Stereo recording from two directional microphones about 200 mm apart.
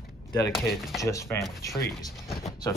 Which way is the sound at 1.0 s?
15° left (ahead or behind).